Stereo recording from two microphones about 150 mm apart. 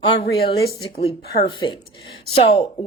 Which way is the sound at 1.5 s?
35° left (ahead or behind).